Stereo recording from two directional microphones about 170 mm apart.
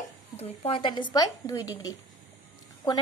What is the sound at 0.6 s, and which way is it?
A woman's voice, 30° left (ahead or behind).